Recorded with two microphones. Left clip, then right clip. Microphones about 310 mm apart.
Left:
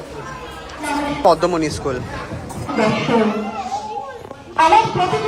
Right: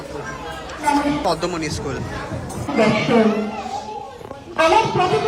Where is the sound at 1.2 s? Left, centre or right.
Centre.